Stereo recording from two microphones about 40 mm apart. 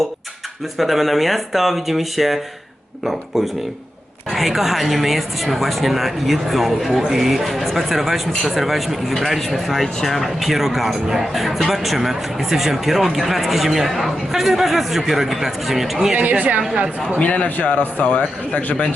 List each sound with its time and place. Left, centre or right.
0.8 s speech: centre
16.1 s speech: right
17.2 s speech: left